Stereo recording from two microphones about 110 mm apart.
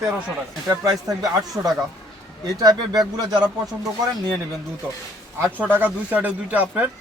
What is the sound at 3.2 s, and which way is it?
Speech, 40° right (ahead or behind).